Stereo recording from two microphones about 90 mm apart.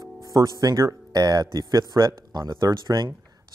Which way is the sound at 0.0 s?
45° right (ahead or behind).